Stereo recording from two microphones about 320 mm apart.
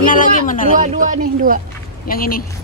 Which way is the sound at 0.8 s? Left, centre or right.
Right.